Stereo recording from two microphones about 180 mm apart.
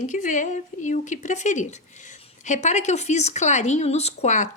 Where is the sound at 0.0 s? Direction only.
45° left (ahead or behind).